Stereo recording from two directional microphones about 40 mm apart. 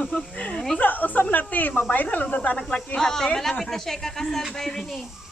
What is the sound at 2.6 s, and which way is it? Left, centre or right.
Speech, centre.